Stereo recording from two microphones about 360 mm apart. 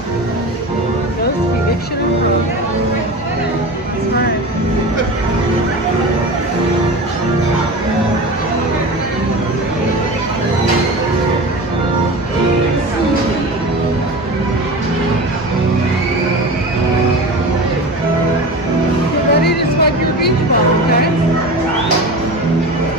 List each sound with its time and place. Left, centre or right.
19.4 s music: left